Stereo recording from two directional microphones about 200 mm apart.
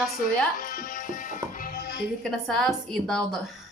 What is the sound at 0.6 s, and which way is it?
Music, 45° left (ahead or behind).